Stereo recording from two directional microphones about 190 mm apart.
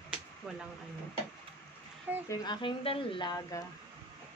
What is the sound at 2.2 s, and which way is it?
Speech, 25° left (ahead or behind).